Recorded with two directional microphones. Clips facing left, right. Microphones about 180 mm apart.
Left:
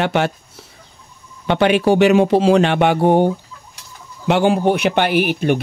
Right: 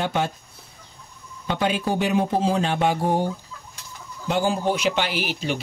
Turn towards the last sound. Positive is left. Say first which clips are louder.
# left 10 dB
turn(degrees=55)  # may be behind; listen again after turning